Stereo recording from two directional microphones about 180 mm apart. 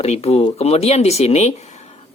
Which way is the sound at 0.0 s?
35° left (ahead or behind).